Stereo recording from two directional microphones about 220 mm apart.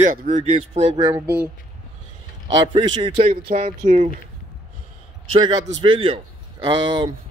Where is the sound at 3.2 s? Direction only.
35° right (ahead or behind).